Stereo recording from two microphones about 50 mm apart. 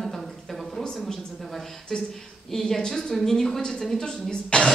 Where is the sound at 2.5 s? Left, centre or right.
Centre.